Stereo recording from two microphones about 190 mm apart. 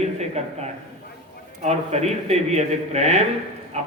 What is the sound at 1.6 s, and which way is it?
A man's voice, 35° right (ahead or behind).